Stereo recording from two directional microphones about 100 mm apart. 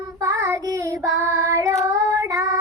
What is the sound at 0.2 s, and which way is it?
Child singing, 30° right (ahead or behind).